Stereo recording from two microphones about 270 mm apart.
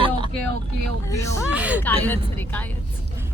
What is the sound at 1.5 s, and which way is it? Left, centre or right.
Speech, centre.